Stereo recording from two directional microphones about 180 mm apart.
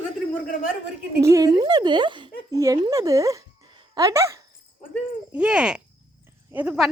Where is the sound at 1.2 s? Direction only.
15° right (ahead or behind).